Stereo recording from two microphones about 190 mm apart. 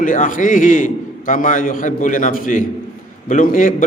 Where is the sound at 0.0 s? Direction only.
45° left (ahead or behind).